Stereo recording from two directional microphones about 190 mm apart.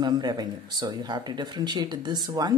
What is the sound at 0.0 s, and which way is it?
Speech, 20° right (ahead or behind).